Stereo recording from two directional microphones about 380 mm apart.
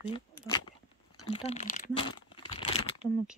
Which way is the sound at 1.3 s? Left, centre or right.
Centre.